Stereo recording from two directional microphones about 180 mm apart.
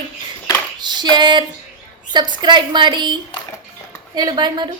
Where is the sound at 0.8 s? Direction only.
25° right (ahead or behind).